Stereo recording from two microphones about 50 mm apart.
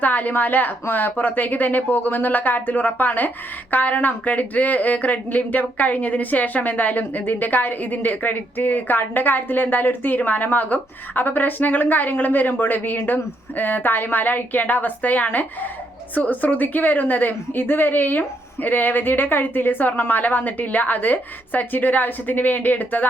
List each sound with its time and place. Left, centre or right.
0.0 s speech: left